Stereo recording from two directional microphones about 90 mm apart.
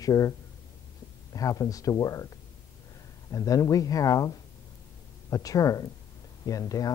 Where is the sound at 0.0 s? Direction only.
40° left (ahead or behind).